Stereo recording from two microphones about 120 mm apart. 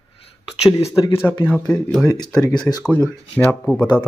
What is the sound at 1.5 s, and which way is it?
Speech, 5° left (ahead or behind).